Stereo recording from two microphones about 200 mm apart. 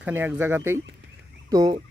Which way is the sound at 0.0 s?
10° right (ahead or behind).